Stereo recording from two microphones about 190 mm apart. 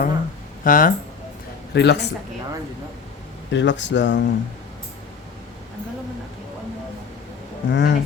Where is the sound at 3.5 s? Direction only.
70° left (ahead or behind).